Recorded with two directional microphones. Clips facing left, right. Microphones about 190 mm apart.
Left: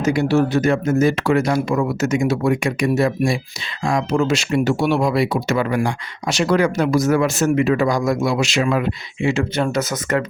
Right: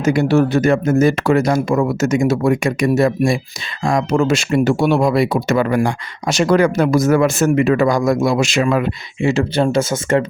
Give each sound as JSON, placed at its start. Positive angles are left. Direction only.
{"t": 0.0, "sound": "speech", "side_deg": -55}
{"t": 9.2, "sound": "speech", "side_deg": -35}